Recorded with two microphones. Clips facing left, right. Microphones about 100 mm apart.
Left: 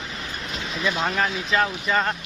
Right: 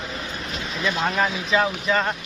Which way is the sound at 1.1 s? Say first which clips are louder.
Right 1 dB; 5° right (ahead or behind).